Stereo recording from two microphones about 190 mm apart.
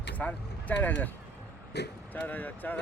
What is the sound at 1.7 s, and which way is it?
Speech, 60° left (ahead or behind).